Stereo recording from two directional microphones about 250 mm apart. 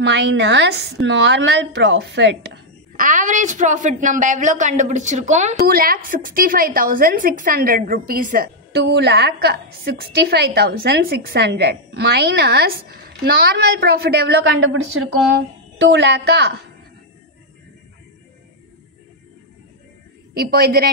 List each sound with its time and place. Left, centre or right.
0.0 s a woman's voice: right
3.0 s a woman's voice: right
20.3 s a woman's voice: right